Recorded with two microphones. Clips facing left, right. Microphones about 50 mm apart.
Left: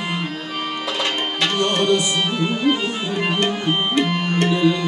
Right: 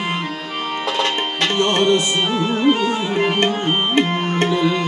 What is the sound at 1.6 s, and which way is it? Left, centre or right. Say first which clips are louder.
Music: right 3 dB; right.